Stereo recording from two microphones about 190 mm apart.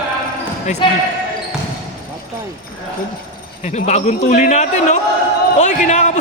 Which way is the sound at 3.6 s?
35° left (ahead or behind).